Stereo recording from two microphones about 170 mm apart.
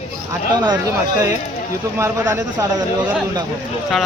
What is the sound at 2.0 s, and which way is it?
Speech, 15° right (ahead or behind).